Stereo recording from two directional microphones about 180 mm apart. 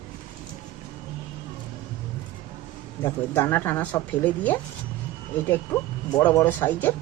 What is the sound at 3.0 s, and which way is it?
Speech, 10° left (ahead or behind).